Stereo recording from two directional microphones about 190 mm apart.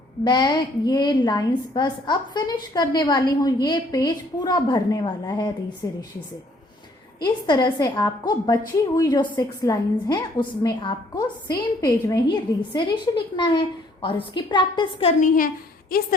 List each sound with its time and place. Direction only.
0.3 s a woman's voice: 20° left (ahead or behind)
7.2 s a woman's voice: 20° left (ahead or behind)
15.9 s a woman's voice: 50° left (ahead or behind)